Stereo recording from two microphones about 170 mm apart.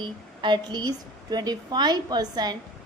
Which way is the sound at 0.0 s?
25° right (ahead or behind).